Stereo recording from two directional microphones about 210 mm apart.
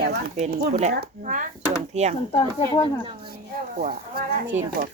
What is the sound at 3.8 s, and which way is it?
Speech, 45° right (ahead or behind).